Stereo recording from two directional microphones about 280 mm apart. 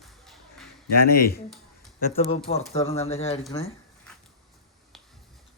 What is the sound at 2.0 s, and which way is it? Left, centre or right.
A woman's voice, left.